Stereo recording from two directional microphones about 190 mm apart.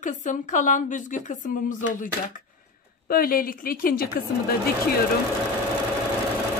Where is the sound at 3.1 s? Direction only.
50° left (ahead or behind).